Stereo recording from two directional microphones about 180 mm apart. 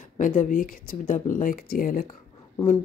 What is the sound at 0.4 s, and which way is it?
Speech, 50° left (ahead or behind).